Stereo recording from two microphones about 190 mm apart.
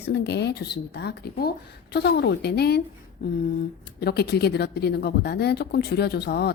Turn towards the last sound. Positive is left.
turn(degrees=60)  # may be behind; listen again after turning